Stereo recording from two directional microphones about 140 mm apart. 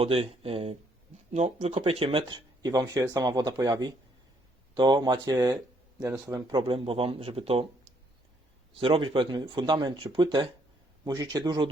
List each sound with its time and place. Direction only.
0.0 s speech: 40° right (ahead or behind)
1.5 s speech: 40° right (ahead or behind); by 6.6 s 25° right (ahead or behind)
6.6 s speech: 40° right (ahead or behind)
8.7 s speech: 40° right (ahead or behind)